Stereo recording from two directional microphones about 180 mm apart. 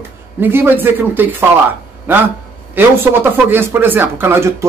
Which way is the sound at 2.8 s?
10° right (ahead or behind).